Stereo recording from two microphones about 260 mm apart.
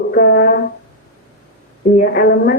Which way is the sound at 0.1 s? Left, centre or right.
Left.